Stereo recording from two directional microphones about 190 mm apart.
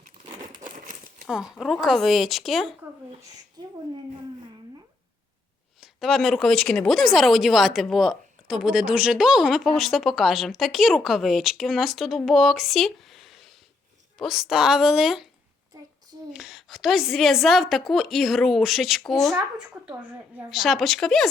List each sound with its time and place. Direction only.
0.4 s crumpling: 45° right (ahead or behind)
1.3 s speech: centre (ahead or behind)
3.6 s a sound: 20° right (ahead or behind)
5.8 s speech: centre (ahead or behind)
16.3 s speech: 5° right (ahead or behind)
20.5 s speech: centre (ahead or behind)